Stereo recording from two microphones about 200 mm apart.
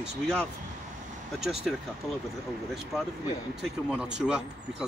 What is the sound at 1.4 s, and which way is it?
Speech, centre (ahead or behind).